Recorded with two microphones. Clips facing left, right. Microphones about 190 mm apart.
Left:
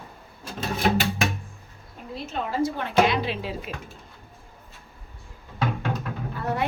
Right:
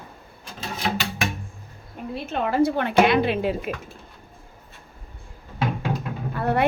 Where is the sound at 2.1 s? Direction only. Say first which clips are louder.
Right 4 dB; 60° right (ahead or behind).